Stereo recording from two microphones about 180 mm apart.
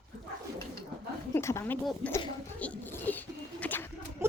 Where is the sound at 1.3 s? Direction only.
15° left (ahead or behind).